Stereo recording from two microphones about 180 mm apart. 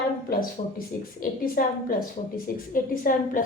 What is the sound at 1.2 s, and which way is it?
A woman's voice, 50° left (ahead or behind).